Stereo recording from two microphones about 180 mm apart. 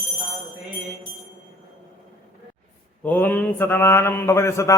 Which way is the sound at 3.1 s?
10° left (ahead or behind).